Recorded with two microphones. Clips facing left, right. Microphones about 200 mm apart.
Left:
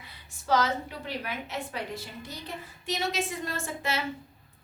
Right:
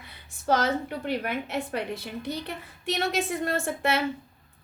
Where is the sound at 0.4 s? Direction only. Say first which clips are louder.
Right 2 dB; 55° right (ahead or behind).